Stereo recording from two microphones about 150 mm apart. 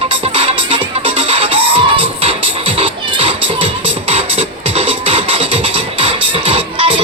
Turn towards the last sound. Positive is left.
turn(degrees=-35)  # may be behind; listen again after turning